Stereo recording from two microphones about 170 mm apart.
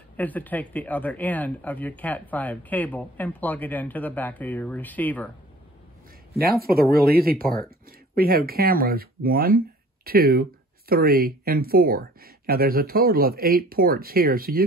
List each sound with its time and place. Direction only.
0.2 s speech: 10° left (ahead or behind)
6.3 s speech: 65° right (ahead or behind)